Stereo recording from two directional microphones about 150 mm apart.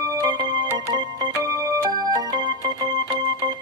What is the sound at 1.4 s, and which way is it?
Music, 25° right (ahead or behind).